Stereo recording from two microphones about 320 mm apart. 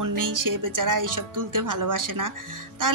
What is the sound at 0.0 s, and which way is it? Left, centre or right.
Speech, right.